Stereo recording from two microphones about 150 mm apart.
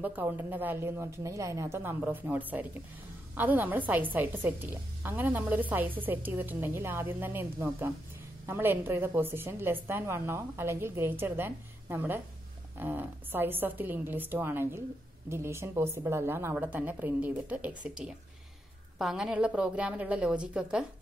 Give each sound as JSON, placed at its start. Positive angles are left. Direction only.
{"t": 0.0, "sound": "a woman's voice", "side_deg": -15}